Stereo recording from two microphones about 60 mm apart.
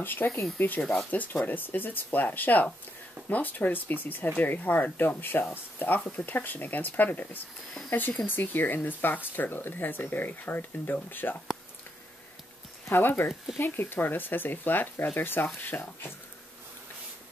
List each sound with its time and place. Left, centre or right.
0.0 s speech: left
8.3 s speech: left
12.9 s speech: left